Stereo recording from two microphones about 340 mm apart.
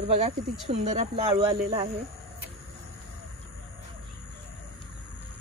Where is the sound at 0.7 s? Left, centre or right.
Centre.